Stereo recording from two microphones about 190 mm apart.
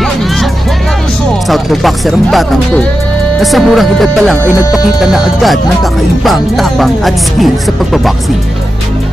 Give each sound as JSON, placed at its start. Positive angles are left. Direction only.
{"t": 1.5, "sound": "music", "side_deg": 0}
{"t": 4.4, "sound": "music", "side_deg": 15}
{"t": 5.0, "sound": "music", "side_deg": 0}